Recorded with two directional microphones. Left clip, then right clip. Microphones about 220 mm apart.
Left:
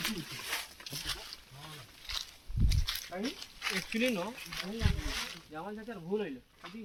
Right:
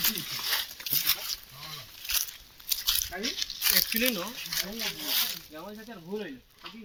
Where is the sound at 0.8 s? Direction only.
45° right (ahead or behind).